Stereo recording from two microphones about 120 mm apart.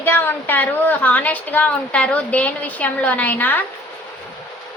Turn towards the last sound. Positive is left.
turn(degrees=15)  # may be behind; listen again after turning